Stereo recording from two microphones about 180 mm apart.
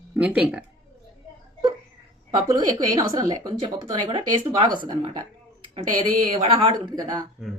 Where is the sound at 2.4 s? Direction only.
25° right (ahead or behind).